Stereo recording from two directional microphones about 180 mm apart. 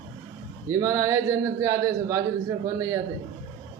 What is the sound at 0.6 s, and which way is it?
A man's voice, 15° right (ahead or behind).